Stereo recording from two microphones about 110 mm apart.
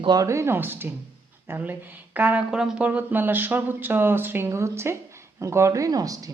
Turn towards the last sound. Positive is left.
turn(degrees=-35)  # may be behind; listen again after turning